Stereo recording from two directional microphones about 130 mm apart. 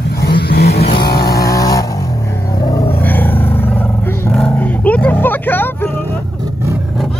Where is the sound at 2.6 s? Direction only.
30° left (ahead or behind).